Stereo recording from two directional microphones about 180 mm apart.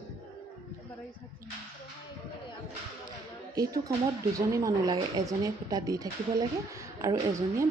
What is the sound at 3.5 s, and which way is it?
A woman's voice, 20° right (ahead or behind).